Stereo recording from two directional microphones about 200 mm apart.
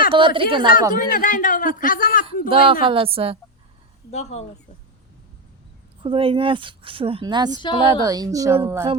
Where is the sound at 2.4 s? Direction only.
25° right (ahead or behind).